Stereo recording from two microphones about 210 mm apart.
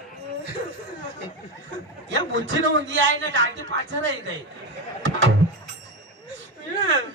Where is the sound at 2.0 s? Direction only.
60° right (ahead or behind).